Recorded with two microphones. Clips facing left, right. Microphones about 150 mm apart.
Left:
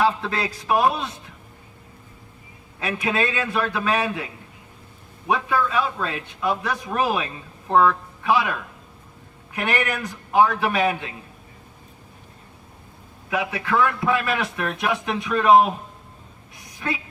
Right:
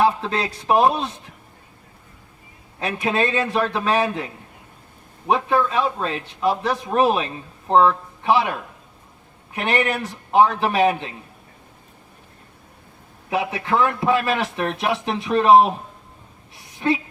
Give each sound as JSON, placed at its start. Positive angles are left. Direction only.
{"t": 0.2, "sound": "a man's voice", "side_deg": -30}
{"t": 2.8, "sound": "a man's voice", "side_deg": -35}
{"t": 5.3, "sound": "a man's voice", "side_deg": -30}
{"t": 9.6, "sound": "a man's voice", "side_deg": -25}
{"t": 13.3, "sound": "speech", "side_deg": -30}
{"t": 16.8, "sound": "a man's voice", "side_deg": -30}